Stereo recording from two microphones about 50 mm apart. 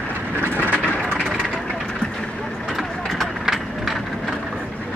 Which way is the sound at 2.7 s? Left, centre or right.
Centre.